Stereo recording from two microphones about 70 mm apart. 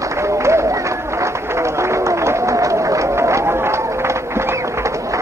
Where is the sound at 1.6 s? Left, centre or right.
Right.